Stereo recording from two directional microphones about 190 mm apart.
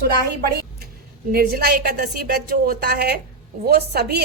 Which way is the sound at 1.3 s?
50° right (ahead or behind).